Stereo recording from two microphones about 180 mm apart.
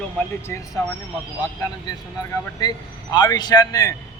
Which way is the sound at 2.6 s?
25° left (ahead or behind).